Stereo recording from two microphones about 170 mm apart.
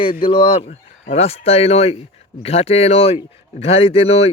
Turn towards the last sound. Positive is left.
turn(degrees=35)  # may be behind; listen again after turning